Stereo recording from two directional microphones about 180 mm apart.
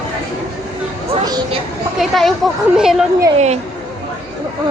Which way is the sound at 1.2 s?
25° right (ahead or behind).